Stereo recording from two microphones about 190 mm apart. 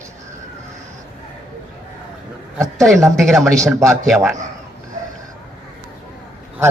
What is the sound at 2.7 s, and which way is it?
A man's voice, centre (ahead or behind).